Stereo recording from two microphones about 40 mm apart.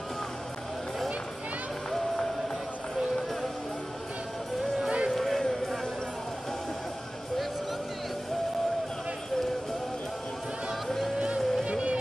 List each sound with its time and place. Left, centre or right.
1.9 s music: centre
5.1 s music: centre
11.1 s music: right